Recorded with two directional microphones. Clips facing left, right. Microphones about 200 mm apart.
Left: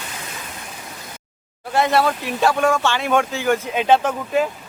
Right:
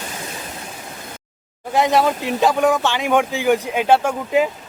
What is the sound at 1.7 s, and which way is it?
Speech, 15° right (ahead or behind).